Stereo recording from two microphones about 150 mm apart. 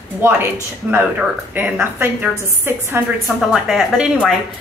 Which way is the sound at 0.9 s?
10° right (ahead or behind).